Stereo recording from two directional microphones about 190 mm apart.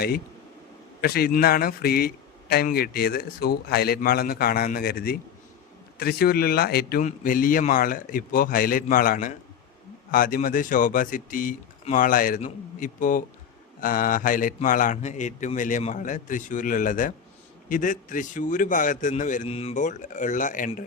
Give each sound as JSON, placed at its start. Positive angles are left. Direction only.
{"t": 1.0, "sound": "a man's voice", "side_deg": 55}